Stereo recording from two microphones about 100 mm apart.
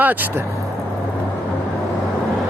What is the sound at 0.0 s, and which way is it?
Speech, 20° right (ahead or behind).